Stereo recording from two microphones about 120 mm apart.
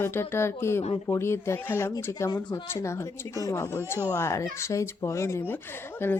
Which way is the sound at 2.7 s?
25° left (ahead or behind).